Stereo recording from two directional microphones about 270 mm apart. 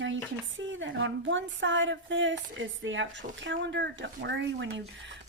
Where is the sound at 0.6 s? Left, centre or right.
Right.